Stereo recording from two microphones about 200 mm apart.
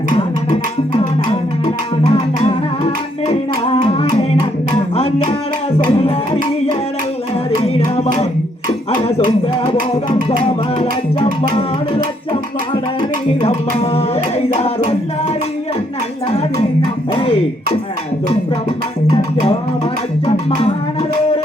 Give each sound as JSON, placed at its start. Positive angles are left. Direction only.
{"t": 2.1, "sound": "music", "side_deg": 30}
{"t": 7.5, "sound": "music", "side_deg": 30}
{"t": 9.0, "sound": "a sound", "side_deg": 30}
{"t": 10.4, "sound": "music", "side_deg": 30}
{"t": 13.0, "sound": "music", "side_deg": 30}
{"t": 19.0, "sound": "music", "side_deg": 30}